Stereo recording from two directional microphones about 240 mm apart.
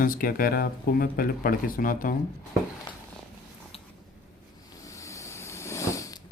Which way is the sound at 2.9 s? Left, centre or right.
Centre.